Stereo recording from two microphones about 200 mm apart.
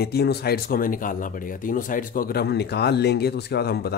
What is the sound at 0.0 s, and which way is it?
Speech, 55° left (ahead or behind).